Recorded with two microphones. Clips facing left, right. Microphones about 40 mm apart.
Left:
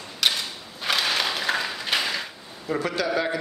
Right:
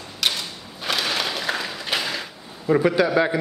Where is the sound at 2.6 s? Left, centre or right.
Centre.